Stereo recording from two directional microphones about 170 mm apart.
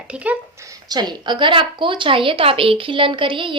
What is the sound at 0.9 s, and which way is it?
A woman's voice, 25° right (ahead or behind).